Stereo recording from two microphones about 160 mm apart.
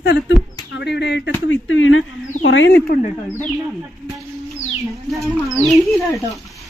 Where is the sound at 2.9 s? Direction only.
60° left (ahead or behind).